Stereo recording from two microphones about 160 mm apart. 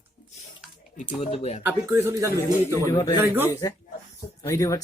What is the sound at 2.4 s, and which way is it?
A man's voice, 20° left (ahead or behind).